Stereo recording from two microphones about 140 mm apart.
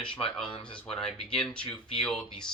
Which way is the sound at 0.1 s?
40° left (ahead or behind).